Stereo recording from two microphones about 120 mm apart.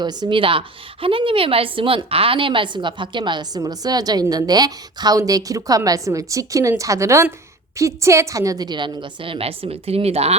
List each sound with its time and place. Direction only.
0.0 s a woman's voice: 35° right (ahead or behind); by 10.3 s 60° right (ahead or behind)